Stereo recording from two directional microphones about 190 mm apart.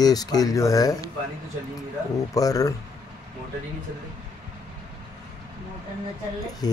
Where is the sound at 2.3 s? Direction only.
20° left (ahead or behind).